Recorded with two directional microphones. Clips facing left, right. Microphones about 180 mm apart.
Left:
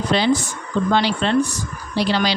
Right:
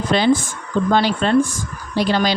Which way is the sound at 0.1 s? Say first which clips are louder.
Right 3 dB; 50° right (ahead or behind).